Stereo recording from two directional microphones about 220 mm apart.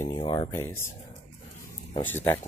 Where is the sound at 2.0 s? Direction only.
10° left (ahead or behind).